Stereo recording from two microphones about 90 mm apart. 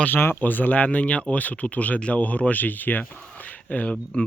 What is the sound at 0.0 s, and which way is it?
Speech, 25° left (ahead or behind).